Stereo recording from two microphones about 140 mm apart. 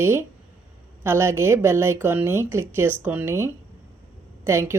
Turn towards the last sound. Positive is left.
turn(degrees=-20)  # may be behind; listen again after turning